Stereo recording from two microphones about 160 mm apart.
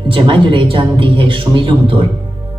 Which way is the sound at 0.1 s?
30° right (ahead or behind).